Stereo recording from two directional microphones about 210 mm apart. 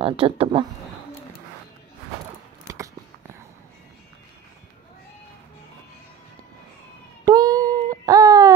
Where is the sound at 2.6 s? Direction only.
15° right (ahead or behind).